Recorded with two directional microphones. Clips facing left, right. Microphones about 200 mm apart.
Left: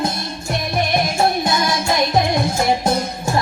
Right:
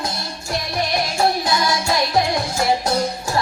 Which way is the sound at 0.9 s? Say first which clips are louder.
Left 1 dB; 25° left (ahead or behind).